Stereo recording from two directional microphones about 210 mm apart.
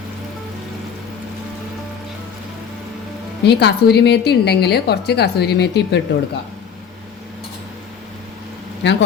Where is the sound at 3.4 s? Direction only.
50° left (ahead or behind).